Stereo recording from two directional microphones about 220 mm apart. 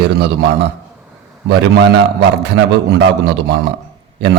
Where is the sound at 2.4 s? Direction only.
50° right (ahead or behind).